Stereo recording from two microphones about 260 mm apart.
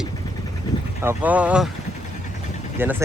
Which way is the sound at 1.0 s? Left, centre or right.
Centre.